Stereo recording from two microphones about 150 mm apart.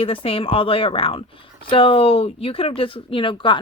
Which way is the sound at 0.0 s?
40° left (ahead or behind).